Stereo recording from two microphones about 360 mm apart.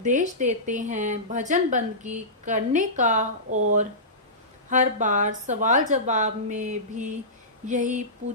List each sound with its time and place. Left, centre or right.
0.0 s speech: right
4.7 s speech: centre